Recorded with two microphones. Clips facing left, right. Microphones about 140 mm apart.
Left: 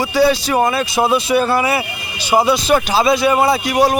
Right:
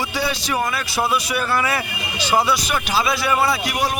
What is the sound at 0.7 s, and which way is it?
Speech, 25° left (ahead or behind).